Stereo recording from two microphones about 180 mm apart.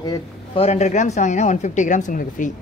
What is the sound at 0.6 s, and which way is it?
Speech, 35° left (ahead or behind).